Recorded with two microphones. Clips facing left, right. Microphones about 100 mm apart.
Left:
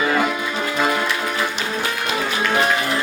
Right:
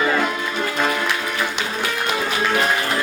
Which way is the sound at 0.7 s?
15° left (ahead or behind).